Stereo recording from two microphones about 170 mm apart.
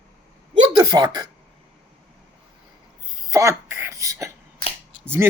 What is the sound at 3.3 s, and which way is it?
Throat clearing, 20° right (ahead or behind).